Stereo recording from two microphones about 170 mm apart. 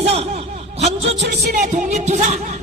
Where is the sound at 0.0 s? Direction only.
35° right (ahead or behind).